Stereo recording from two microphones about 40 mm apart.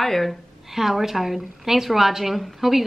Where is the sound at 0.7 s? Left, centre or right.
Centre.